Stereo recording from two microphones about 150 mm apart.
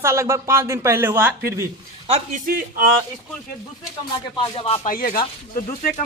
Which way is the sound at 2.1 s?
60° right (ahead or behind).